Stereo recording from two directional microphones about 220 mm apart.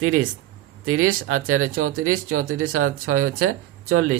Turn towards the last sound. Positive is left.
turn(degrees=-75)  # may be behind; listen again after turning